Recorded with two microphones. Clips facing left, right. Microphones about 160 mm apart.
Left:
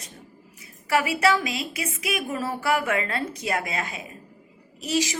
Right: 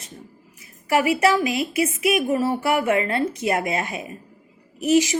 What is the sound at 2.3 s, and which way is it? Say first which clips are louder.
A woman's voice: right 5 dB; 20° right (ahead or behind).